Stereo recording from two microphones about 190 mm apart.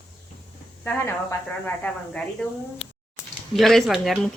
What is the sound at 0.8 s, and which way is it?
Speech, 10° left (ahead or behind).